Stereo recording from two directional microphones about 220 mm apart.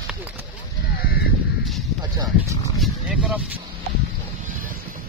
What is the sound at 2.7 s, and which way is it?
Vehicle, centre (ahead or behind).